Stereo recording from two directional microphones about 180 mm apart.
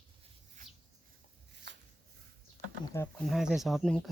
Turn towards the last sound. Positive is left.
turn(degrees=0)  # may be behind; listen again after turning